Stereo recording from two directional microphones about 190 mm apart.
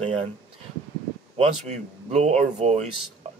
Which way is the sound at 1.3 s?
35° right (ahead or behind).